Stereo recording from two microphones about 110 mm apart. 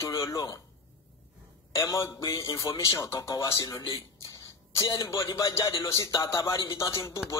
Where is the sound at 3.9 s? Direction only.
30° left (ahead or behind).